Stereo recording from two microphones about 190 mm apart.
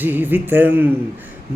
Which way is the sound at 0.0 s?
10° right (ahead or behind).